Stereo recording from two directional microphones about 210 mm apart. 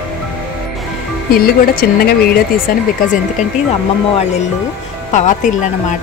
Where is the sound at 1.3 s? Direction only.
45° left (ahead or behind).